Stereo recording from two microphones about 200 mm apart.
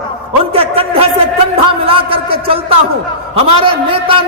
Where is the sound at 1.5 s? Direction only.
30° right (ahead or behind).